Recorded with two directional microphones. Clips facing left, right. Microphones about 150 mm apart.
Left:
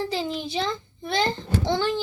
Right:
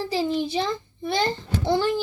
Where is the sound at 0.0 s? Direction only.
10° right (ahead or behind).